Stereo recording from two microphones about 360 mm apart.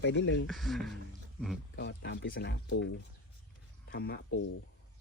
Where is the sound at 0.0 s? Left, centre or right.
Left.